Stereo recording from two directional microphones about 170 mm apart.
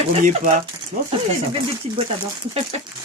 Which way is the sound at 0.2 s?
45° right (ahead or behind).